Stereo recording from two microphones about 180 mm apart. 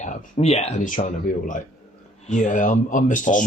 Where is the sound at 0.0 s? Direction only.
40° left (ahead or behind).